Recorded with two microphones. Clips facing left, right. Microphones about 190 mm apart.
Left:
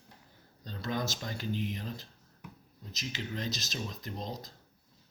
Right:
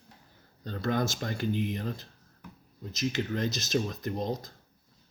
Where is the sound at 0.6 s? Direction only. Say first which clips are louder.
Right 6 dB; 55° right (ahead or behind).